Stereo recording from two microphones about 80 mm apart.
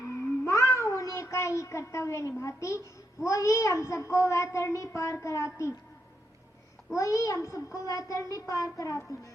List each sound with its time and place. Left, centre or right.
0.4 s meow: left
2.4 s a child's voice: left
6.9 s a child's voice: left